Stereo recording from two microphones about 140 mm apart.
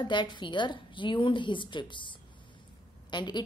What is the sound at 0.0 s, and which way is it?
A woman's voice, 35° left (ahead or behind).